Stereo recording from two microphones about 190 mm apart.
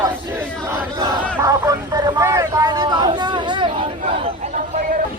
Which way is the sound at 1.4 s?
15° right (ahead or behind).